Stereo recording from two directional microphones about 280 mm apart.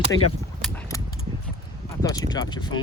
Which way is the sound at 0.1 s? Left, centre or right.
Left.